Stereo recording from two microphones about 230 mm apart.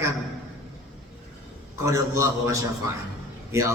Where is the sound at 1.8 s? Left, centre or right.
Centre.